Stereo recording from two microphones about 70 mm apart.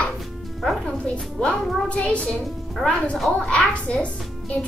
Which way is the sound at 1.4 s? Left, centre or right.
Centre.